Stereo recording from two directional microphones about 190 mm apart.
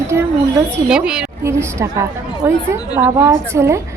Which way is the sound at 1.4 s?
15° right (ahead or behind).